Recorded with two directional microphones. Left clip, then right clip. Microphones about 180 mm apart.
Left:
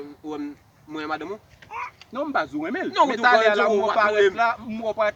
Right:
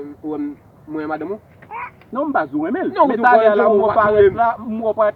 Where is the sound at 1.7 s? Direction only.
20° left (ahead or behind).